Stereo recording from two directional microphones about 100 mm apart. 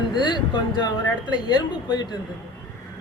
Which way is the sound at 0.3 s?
45° left (ahead or behind).